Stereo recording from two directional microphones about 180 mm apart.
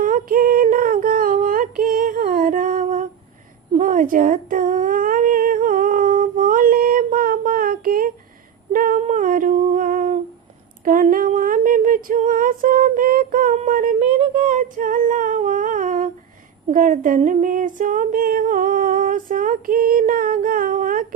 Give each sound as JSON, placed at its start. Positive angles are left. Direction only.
{"t": 0.0, "sound": "female singing", "side_deg": -50}
{"t": 3.8, "sound": "humming", "side_deg": -50}
{"t": 8.7, "sound": "a sound", "side_deg": -50}
{"t": 10.8, "sound": "female singing", "side_deg": -50}
{"t": 14.4, "sound": "humming", "side_deg": -50}